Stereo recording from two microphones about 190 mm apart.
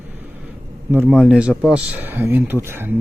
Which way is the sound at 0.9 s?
10° right (ahead or behind).